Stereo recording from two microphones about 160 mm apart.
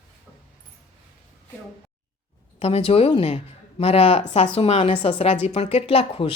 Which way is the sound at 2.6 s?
40° left (ahead or behind).